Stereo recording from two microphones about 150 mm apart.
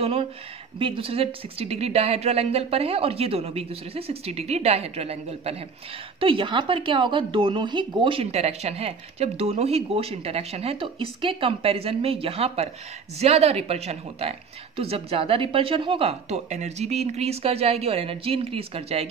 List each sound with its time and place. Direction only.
0.0 s a woman's voice: 40° right (ahead or behind)